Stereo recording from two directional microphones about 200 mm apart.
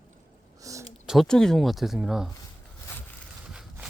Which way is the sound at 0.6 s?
15° right (ahead or behind).